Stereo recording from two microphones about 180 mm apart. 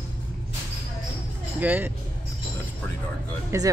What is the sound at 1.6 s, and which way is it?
Speech, 10° right (ahead or behind).